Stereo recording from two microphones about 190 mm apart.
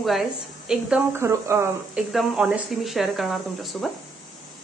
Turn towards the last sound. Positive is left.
turn(degrees=0)  # may be behind; listen again after turning